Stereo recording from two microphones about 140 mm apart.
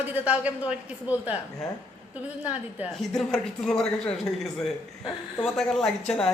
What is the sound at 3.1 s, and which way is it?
Speech, 5° left (ahead or behind).